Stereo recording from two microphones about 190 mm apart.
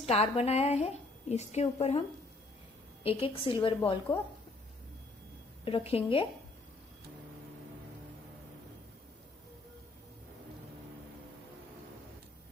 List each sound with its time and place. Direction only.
0.0 s a woman's voice: 35° left (ahead or behind)
5.7 s a woman's voice: 30° left (ahead or behind)